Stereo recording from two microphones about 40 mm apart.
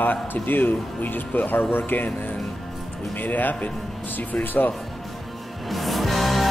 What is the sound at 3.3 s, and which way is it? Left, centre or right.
Speech, left.